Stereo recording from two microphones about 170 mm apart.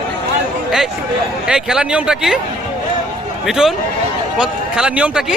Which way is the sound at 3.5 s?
Centre (ahead or behind).